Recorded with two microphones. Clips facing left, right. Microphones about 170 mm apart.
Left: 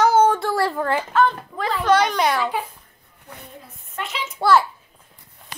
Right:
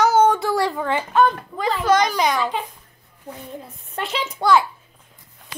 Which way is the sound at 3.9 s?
30° right (ahead or behind).